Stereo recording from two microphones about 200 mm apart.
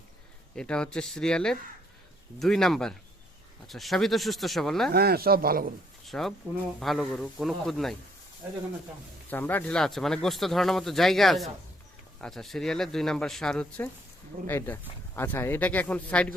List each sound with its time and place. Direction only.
0.5 s speech: 5° left (ahead or behind)
4.9 s speech: 50° right (ahead or behind)
6.1 s speech: centre (ahead or behind)
9.3 s speech: 10° left (ahead or behind)